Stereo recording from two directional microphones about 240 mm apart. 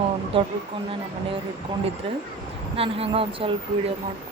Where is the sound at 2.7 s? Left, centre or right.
Right.